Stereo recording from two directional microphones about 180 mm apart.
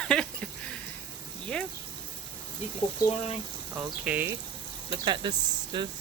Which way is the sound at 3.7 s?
10° right (ahead or behind).